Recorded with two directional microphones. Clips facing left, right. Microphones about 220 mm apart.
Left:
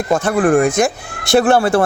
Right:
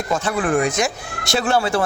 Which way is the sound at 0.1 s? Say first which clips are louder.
Left 7 dB; 50° left (ahead or behind).